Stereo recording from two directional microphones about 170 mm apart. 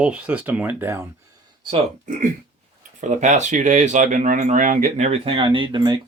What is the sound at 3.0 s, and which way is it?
Speech, 45° right (ahead or behind).